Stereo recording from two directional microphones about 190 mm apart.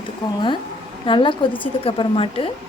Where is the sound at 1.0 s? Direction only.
25° left (ahead or behind).